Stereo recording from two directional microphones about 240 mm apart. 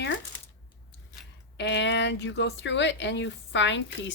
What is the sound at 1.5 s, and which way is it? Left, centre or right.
Speech, left.